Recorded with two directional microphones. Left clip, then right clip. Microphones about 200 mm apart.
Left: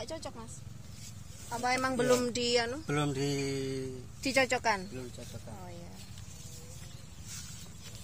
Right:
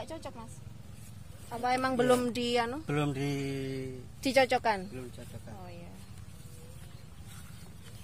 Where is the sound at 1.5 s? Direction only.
40° right (ahead or behind).